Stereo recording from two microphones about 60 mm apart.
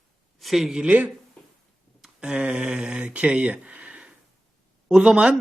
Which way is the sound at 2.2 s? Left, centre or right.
Centre.